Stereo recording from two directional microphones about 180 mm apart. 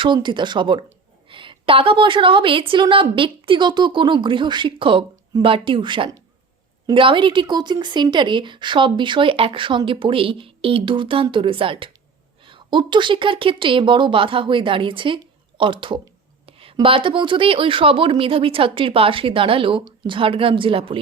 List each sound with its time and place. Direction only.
0.0 s speech: 25° right (ahead or behind)